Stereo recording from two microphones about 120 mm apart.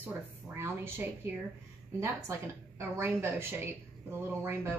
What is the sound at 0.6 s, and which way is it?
Speech, 20° right (ahead or behind).